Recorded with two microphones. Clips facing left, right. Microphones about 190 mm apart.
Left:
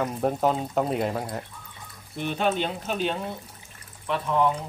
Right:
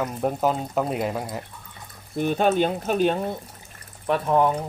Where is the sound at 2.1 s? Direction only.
45° right (ahead or behind).